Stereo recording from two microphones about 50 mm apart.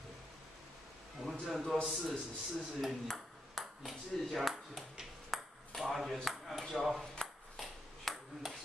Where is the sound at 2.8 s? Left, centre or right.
Centre.